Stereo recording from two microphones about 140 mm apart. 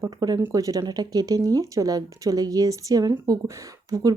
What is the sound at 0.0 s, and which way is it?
Speech, 25° right (ahead or behind).